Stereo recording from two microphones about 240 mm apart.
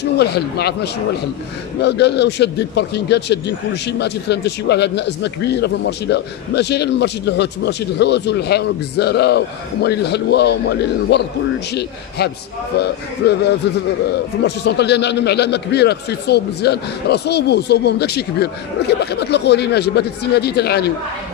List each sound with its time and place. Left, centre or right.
0.0 s a man's voice: left
1.8 s a man's voice: left